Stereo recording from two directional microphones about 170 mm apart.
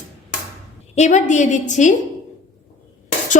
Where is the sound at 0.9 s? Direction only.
45° left (ahead or behind).